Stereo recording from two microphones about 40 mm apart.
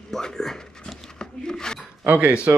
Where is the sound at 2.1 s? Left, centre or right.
Right.